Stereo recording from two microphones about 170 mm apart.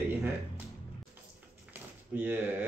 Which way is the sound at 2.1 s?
10° right (ahead or behind).